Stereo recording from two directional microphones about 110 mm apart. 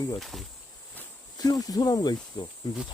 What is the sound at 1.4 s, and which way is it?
Speech, 35° left (ahead or behind).